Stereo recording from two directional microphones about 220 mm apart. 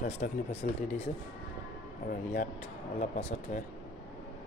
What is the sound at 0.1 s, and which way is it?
Speech, 30° left (ahead or behind).